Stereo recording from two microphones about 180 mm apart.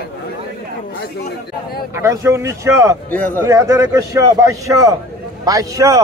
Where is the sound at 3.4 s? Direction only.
15° right (ahead or behind).